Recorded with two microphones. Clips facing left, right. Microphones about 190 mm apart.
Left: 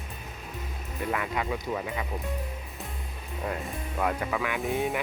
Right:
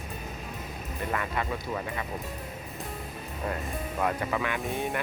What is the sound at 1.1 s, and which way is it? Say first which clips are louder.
Speech: left 1 dB; 10° left (ahead or behind).